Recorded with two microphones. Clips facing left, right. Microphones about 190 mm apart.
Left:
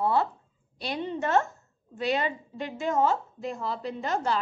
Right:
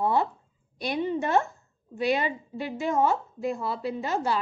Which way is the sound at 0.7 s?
15° right (ahead or behind).